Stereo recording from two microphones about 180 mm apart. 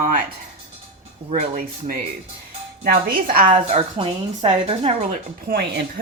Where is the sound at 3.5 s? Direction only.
30° right (ahead or behind).